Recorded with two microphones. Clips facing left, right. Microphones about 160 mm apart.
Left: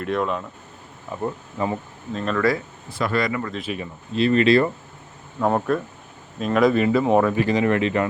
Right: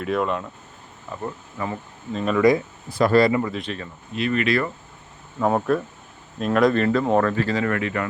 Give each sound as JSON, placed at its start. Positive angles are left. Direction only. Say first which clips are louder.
{"t": 0.0, "sound": "speech", "louder": "even", "side_deg": 0}
{"t": 1.1, "sound": "speech", "louder": "left 4 dB", "side_deg": 20}
{"t": 2.1, "sound": "speech", "louder": "right 2 dB", "side_deg": -5}
{"t": 3.0, "sound": "speech", "louder": "right 6 dB", "side_deg": -35}
{"t": 3.6, "sound": "speech", "louder": "left 2 dB", "side_deg": 10}
{"t": 4.1, "sound": "speech", "louder": "left 5 dB", "side_deg": 30}
{"t": 5.4, "sound": "speech", "louder": "even", "side_deg": 0}